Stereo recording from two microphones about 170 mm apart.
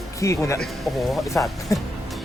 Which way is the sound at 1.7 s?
20° left (ahead or behind).